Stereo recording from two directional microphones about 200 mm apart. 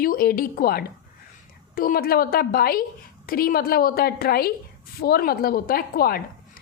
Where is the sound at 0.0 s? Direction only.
45° left (ahead or behind).